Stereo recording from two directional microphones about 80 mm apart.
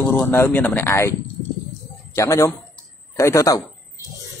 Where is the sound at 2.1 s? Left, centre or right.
Left.